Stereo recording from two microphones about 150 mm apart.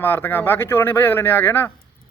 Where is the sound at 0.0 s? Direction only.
15° left (ahead or behind).